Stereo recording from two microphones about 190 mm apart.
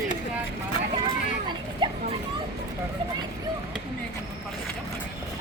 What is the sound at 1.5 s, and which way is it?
Children playing, 25° right (ahead or behind).